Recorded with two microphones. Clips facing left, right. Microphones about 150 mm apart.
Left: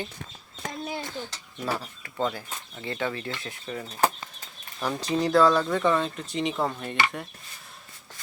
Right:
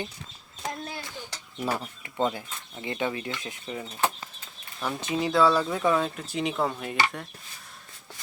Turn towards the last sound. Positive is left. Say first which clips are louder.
# even
turn(degrees=-5)  # may be behind; listen again after turning